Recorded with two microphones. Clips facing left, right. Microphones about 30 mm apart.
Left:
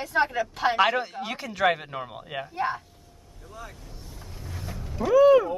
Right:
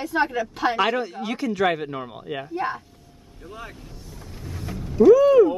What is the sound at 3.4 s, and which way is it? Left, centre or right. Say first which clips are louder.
Speech: right 4 dB; right.